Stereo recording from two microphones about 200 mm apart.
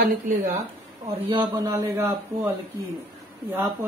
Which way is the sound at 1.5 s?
15° right (ahead or behind).